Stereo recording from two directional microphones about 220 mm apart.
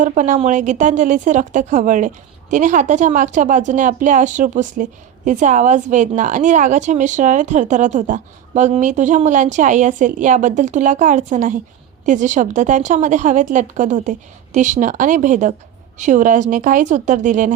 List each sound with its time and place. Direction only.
0.0 s a woman's voice: 35° right (ahead or behind)